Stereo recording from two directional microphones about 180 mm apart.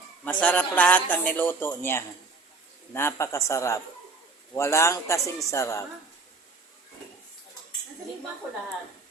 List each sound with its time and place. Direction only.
0.3 s a man's voice: 5° left (ahead or behind)